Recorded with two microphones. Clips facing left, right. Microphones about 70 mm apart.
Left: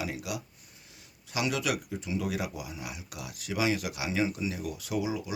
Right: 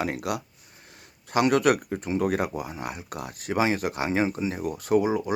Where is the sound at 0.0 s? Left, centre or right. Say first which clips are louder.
Right 7 dB; right.